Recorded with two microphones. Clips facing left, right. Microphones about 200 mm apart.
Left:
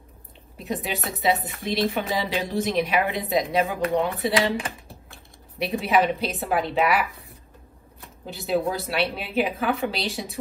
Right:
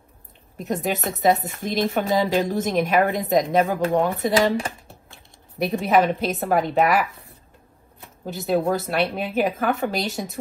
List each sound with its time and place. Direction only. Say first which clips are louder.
0.6 s speech: right 4 dB; 45° right (ahead or behind)
5.6 s speech: right 3 dB; 50° right (ahead or behind)
8.3 s speech: right 3 dB; 50° right (ahead or behind)